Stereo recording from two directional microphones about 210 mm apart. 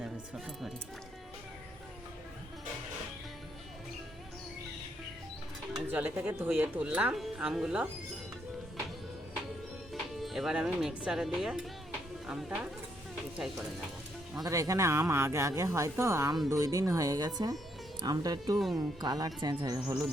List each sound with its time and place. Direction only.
0.0 s speech: centre (ahead or behind)
5.7 s speech: 10° right (ahead or behind)
9.9 s speech: centre (ahead or behind)
14.4 s speech: 15° right (ahead or behind)